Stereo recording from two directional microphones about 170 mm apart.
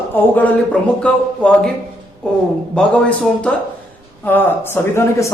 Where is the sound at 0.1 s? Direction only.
10° left (ahead or behind).